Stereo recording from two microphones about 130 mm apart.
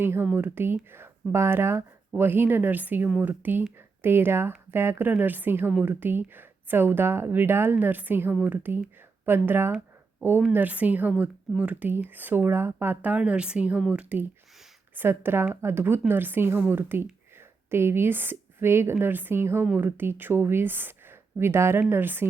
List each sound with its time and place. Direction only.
0.0 s speech: 15° right (ahead or behind)